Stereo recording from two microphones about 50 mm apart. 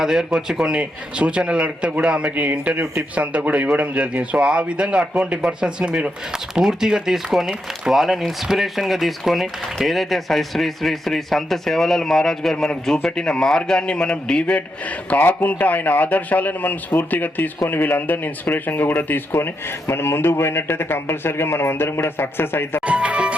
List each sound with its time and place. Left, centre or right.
0.0 s a man's voice: centre; by 14.6 s left
15.1 s a man's voice: left
22.9 s music: right